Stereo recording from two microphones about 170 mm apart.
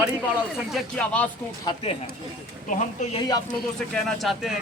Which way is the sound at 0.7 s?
5° left (ahead or behind).